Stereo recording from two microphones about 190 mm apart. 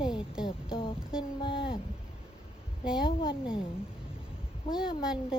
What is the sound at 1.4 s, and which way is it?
Speech, 25° left (ahead or behind).